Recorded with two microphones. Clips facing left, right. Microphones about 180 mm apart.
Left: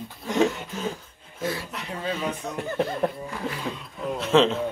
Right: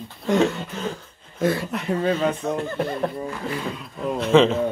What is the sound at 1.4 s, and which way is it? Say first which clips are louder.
Speech: right 8 dB; 55° right (ahead or behind).